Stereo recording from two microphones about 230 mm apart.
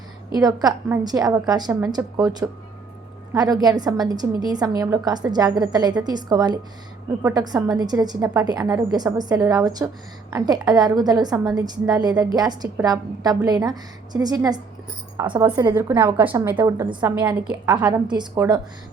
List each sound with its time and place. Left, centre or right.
0.3 s a woman's voice: centre